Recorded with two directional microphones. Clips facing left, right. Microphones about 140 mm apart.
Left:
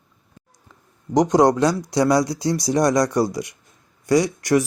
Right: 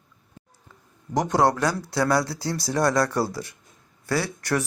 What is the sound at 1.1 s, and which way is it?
Speech, 20° left (ahead or behind).